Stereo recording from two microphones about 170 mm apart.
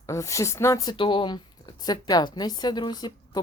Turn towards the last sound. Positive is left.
turn(degrees=25)  # may be behind; listen again after turning